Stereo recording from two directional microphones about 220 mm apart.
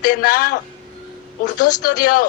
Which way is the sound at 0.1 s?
40° left (ahead or behind).